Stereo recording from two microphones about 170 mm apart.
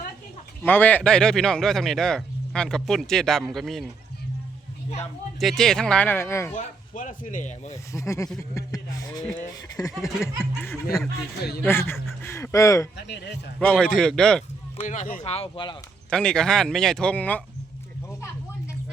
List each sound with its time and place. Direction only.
0.6 s a man's voice: 10° left (ahead or behind)
5.4 s a man's voice: centre (ahead or behind)
6.5 s speech: 50° left (ahead or behind)
7.9 s speech: 15° left (ahead or behind)
10.2 s a man's voice: 5° right (ahead or behind)
11.6 s speech: 15° left (ahead or behind)
13.0 s a man's voice: 90° left
13.6 s a man's voice: 5° left (ahead or behind)
14.8 s speech: 45° left (ahead or behind)
15.2 s speech: 35° left (ahead or behind)
16.0 s a man's voice: 5° left (ahead or behind)